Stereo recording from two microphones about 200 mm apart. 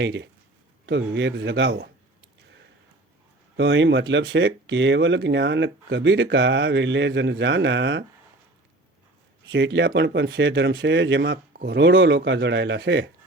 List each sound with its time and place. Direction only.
0.0 s speech: 60° right (ahead or behind)
3.6 s speech: 65° right (ahead or behind)
9.5 s speech: 65° right (ahead or behind)